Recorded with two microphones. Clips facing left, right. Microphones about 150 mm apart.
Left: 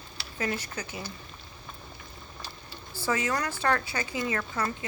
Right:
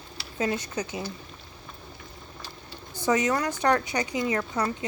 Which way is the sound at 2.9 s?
15° right (ahead or behind).